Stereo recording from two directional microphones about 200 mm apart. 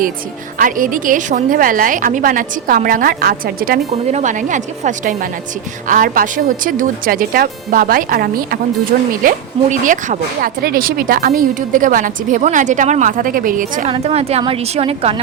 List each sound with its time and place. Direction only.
0.6 s a woman's voice: 40° right (ahead or behind)
3.9 s a woman's voice: 35° right (ahead or behind)
13.9 s speech: 30° right (ahead or behind)